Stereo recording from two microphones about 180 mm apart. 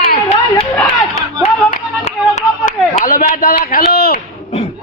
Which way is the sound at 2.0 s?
40° left (ahead or behind).